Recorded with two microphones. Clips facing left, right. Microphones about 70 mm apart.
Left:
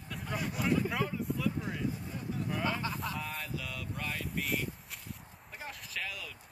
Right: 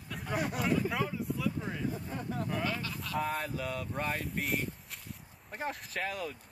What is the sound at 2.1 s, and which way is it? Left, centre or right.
Speech, right.